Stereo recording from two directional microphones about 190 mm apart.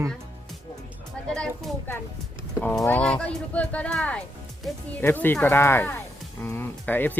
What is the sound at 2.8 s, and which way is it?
Speech, 10° left (ahead or behind).